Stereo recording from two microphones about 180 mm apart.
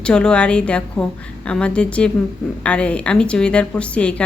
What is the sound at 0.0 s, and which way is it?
Speech, 5° left (ahead or behind).